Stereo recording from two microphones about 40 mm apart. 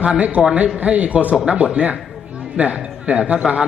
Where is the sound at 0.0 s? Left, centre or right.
Right.